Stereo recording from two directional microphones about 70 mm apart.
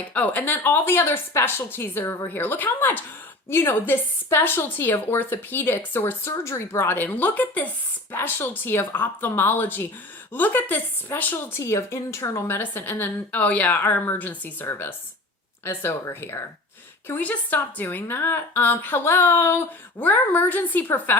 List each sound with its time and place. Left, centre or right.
0.0 s a woman's voice: left
12.5 s a woman's voice: left
17.2 s a woman's voice: left
20.0 s a woman's voice: left